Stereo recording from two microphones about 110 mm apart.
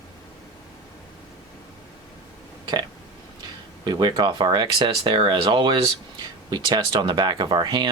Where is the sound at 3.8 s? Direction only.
40° right (ahead or behind).